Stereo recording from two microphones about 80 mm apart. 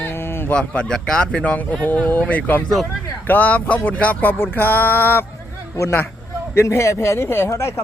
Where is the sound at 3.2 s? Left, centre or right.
Left.